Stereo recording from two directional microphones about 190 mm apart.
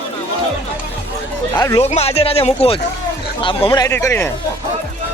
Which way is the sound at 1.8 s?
35° left (ahead or behind).